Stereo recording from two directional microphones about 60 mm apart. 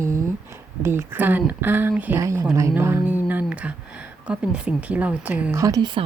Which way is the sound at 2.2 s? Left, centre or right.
Right.